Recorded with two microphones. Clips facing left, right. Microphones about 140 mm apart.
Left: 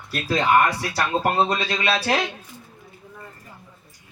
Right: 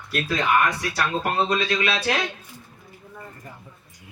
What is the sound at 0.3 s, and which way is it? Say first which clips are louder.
Speech: left 4 dB; 30° left (ahead or behind).